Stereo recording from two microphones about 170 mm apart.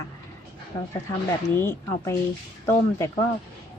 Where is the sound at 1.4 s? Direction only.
15° left (ahead or behind).